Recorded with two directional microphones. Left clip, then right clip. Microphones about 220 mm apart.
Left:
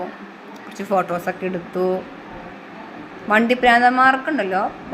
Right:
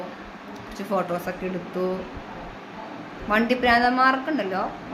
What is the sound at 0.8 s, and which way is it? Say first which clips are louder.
Speech: left 5 dB; 25° left (ahead or behind).